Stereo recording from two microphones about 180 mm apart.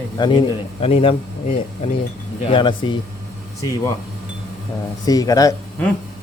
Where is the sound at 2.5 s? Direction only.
30° left (ahead or behind).